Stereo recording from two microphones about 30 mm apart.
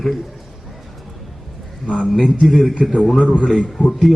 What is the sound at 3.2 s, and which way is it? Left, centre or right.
Speech, left.